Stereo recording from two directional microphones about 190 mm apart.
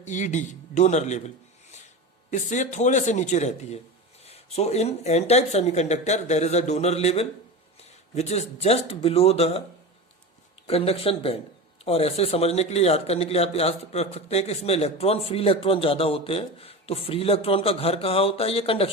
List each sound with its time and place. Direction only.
0.0 s speech: 40° left (ahead or behind)
2.3 s speech: 40° left (ahead or behind)
10.7 s speech: 30° left (ahead or behind)